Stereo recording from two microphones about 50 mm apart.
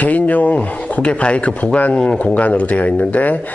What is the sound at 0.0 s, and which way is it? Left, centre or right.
Speech, left.